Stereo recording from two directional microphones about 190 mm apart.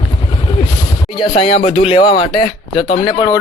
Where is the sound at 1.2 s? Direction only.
30° left (ahead or behind).